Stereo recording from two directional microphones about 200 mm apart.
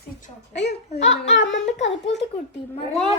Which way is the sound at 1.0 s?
70° left (ahead or behind).